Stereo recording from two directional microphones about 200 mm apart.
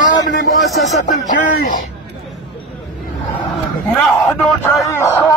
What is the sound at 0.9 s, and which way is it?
Speech, 40° left (ahead or behind).